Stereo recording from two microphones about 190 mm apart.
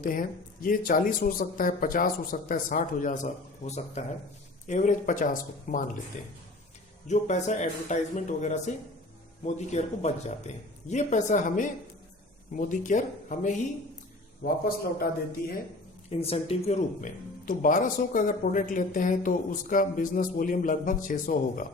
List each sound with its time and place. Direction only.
0.0 s a man's voice: 45° left (ahead or behind)
16.0 s speech: 30° left (ahead or behind)